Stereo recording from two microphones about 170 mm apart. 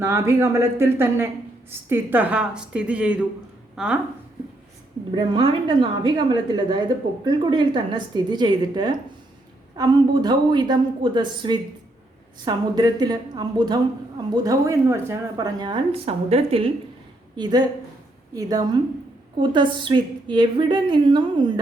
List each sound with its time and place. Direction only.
0.0 s a woman's voice: 15° right (ahead or behind)
5.1 s a woman's voice: 30° right (ahead or behind)
17.3 s a woman's voice: 25° right (ahead or behind)